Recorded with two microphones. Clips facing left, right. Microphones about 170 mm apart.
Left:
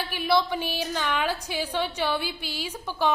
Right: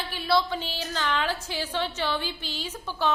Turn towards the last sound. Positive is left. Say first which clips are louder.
# left 2 dB
turn(degrees=15)  # may be behind; listen again after turning